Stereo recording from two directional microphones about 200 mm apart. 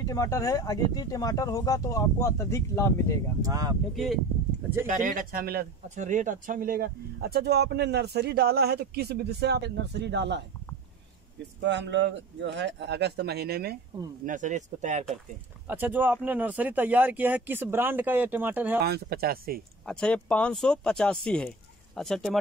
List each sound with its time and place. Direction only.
0.0 s speech: 15° left (ahead or behind)
3.4 s speech: 20° right (ahead or behind)
3.9 s speech: centre (ahead or behind)
4.8 s speech: 40° right (ahead or behind)
5.9 s speech: 40° right (ahead or behind); by 10.4 s 60° right (ahead or behind)
11.6 s speech: 60° right (ahead or behind)
14.2 s speech: 40° right (ahead or behind)
15.6 s speech: 10° right (ahead or behind)
18.8 s speech: 55° right (ahead or behind)
19.9 s speech: 5° left (ahead or behind)